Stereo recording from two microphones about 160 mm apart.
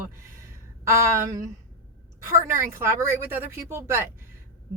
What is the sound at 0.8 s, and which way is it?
Speech, 15° right (ahead or behind).